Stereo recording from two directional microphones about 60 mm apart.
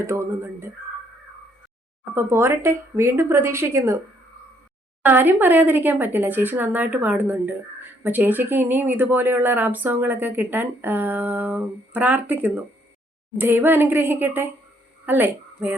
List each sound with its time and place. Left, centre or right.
0.0 s a woman's voice: right
2.1 s a woman's voice: right
5.0 s a woman's voice: right